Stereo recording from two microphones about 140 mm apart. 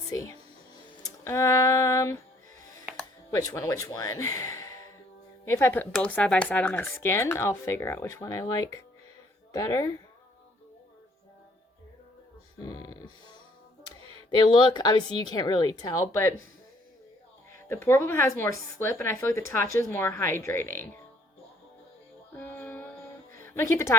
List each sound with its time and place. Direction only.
0.1 s speech: 20° left (ahead or behind)
1.0 s music: 20° left (ahead or behind)
3.3 s speech: 20° left (ahead or behind)
12.5 s speech: 25° left (ahead or behind)
14.3 s a woman's voice: 35° left (ahead or behind)
17.7 s speech: 15° left (ahead or behind)
22.4 s music: 15° left (ahead or behind)
23.4 s speech: 20° left (ahead or behind)